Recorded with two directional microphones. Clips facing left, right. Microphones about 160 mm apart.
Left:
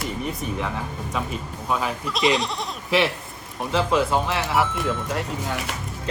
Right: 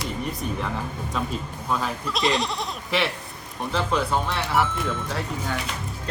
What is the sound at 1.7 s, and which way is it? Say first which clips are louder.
Speech: left 1 dB; 5° left (ahead or behind).